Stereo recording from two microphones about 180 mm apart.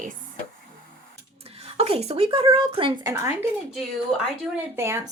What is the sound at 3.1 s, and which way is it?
Speech, 15° right (ahead or behind).